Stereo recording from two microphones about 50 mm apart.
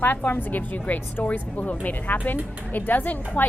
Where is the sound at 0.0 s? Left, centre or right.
Left.